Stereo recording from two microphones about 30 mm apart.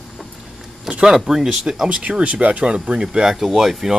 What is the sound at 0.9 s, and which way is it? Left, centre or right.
Speech, centre.